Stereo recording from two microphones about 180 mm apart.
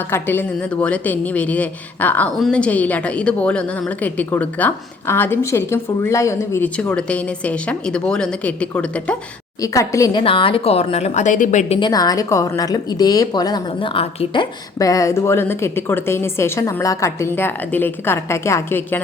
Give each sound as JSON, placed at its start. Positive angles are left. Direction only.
{"t": 0.1, "sound": "a woman's voice", "side_deg": 10}
{"t": 9.6, "sound": "speech", "side_deg": 20}
{"t": 11.8, "sound": "a woman's voice", "side_deg": 20}
{"t": 14.8, "sound": "a woman's voice", "side_deg": 20}